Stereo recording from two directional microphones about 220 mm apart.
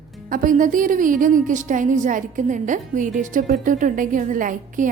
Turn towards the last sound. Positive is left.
turn(degrees=-35)  # may be behind; listen again after turning